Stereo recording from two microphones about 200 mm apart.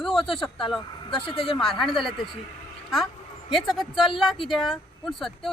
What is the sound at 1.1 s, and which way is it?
Speech, 25° left (ahead or behind).